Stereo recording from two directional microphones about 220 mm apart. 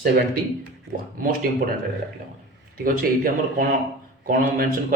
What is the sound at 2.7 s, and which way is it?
Speech, 40° right (ahead or behind).